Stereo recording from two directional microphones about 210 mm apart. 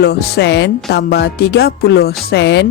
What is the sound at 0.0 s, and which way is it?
Speech, 50° left (ahead or behind).